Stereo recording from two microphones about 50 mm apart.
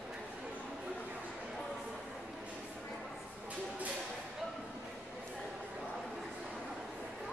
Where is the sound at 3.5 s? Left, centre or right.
Right.